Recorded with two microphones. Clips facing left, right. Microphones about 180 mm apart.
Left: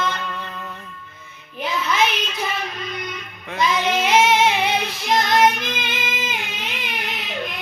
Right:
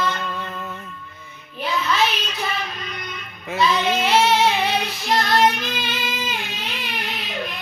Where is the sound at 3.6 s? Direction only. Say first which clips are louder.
Even; 15° left (ahead or behind).